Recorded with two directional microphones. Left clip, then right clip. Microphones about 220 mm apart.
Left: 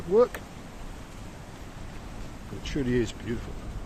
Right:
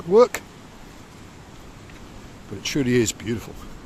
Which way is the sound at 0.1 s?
50° right (ahead or behind).